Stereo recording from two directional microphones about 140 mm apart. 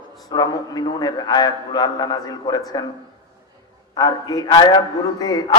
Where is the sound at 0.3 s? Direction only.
25° left (ahead or behind).